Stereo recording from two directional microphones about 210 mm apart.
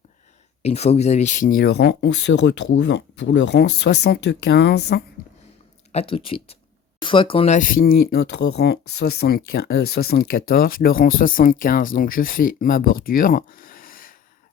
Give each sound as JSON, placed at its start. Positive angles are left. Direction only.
{"t": 0.6, "sound": "speech", "side_deg": 30}
{"t": 5.9, "sound": "speech", "side_deg": 30}